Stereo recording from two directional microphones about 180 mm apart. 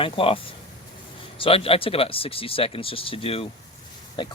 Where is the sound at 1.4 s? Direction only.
30° left (ahead or behind).